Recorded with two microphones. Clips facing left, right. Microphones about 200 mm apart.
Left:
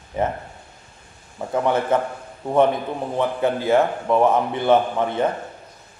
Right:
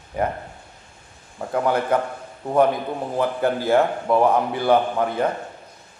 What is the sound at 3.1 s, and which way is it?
A man's voice, centre (ahead or behind).